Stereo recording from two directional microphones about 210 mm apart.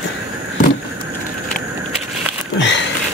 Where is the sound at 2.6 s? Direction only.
60° left (ahead or behind).